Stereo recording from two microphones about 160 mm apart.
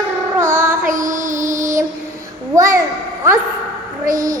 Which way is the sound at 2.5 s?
20° right (ahead or behind).